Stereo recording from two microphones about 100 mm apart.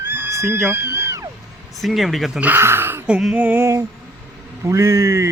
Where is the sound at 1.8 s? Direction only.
Centre (ahead or behind).